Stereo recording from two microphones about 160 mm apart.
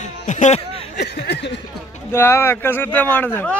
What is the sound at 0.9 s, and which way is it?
Speech, 90° left.